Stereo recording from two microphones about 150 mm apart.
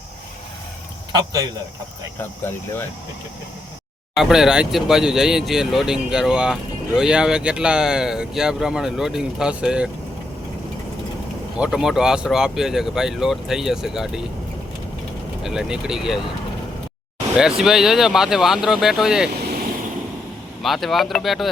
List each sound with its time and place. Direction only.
1.1 s speech: 25° right (ahead or behind)
2.1 s speech: 15° left (ahead or behind)
4.1 s speech: centre (ahead or behind)
11.5 s speech: 5° right (ahead or behind)
15.4 s speech: 5° right (ahead or behind)
17.6 s speech: 5° right (ahead or behind)
20.6 s speech: centre (ahead or behind)